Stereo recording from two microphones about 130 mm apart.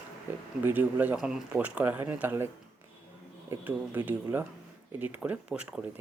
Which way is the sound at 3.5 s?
15° right (ahead or behind).